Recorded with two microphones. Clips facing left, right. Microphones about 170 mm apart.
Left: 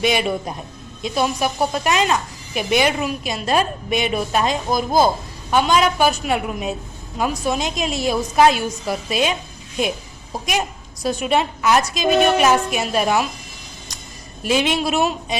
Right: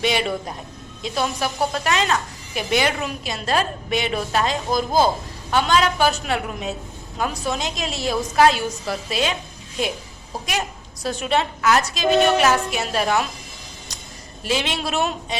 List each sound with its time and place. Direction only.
0.0 s a woman's voice: 15° left (ahead or behind)
10.3 s a woman's voice: 15° left (ahead or behind)
14.4 s a woman's voice: 15° left (ahead or behind)